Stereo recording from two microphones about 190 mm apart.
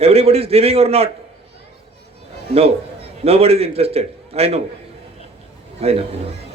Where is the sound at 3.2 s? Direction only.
30° right (ahead or behind).